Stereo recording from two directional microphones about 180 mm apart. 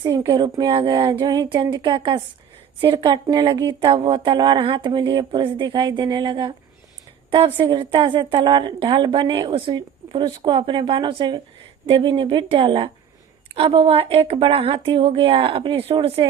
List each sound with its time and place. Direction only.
0.0 s speech: 15° right (ahead or behind)
0.3 s a woman's voice: 25° right (ahead or behind)